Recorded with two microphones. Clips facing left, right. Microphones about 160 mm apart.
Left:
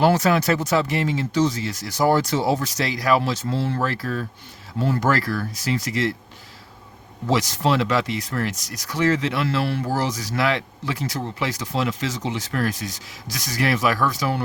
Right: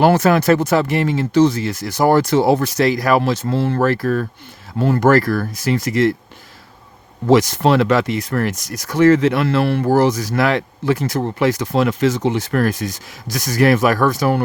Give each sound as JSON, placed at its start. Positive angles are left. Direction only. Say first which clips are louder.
{"t": 0.0, "sound": "speech", "louder": "right 5 dB", "side_deg": -55}
{"t": 7.3, "sound": "speech", "louder": "right 8 dB", "side_deg": -55}